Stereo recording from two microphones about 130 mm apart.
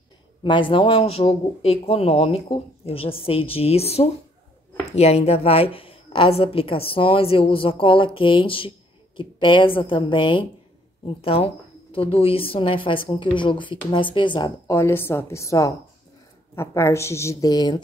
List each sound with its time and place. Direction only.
0.4 s a woman's voice: 40° left (ahead or behind)
14.7 s speech: 20° left (ahead or behind)